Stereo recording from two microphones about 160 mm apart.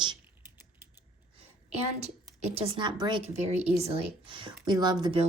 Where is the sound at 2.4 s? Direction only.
40° right (ahead or behind).